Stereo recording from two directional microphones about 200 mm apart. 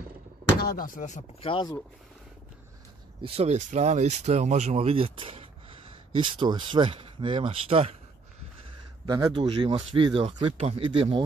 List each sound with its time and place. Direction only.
0.6 s speech: 45° left (ahead or behind); by 1.8 s 25° left (ahead or behind)
3.2 s speech: 30° right (ahead or behind)
9.0 s speech: 20° right (ahead or behind)